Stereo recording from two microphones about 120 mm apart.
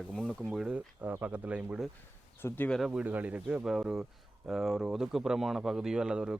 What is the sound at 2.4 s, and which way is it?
Speech, 15° left (ahead or behind).